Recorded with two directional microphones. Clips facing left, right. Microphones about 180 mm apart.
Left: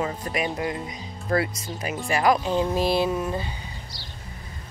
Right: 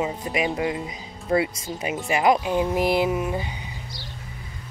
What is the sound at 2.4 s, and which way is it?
Speech, 10° right (ahead or behind).